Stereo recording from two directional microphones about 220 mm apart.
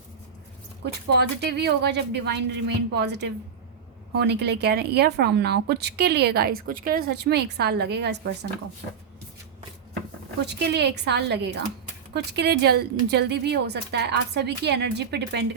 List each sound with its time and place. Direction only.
1.1 s speech: 50° right (ahead or behind)
10.4 s speech: 50° right (ahead or behind)